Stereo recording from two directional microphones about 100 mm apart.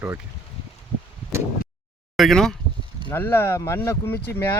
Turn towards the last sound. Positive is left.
turn(degrees=25)  # may be behind; listen again after turning